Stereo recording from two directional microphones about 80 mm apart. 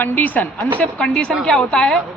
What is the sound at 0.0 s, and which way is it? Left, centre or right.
A woman's voice, left.